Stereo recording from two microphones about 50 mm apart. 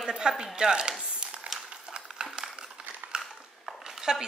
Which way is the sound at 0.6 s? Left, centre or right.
Centre.